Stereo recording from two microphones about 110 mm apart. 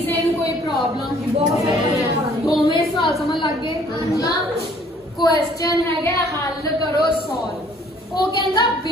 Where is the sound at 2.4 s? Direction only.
Centre (ahead or behind).